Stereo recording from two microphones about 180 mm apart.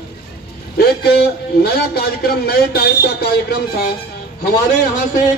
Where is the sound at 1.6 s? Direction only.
60° left (ahead or behind).